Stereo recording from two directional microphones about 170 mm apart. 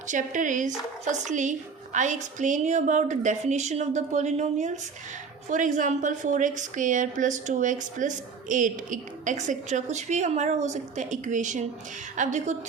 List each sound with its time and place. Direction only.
0.1 s a woman's voice: 50° right (ahead or behind)